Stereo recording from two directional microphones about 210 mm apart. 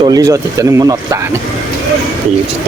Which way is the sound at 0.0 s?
15° right (ahead or behind).